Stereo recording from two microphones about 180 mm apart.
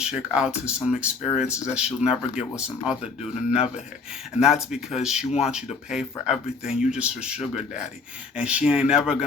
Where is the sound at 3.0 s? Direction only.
35° left (ahead or behind).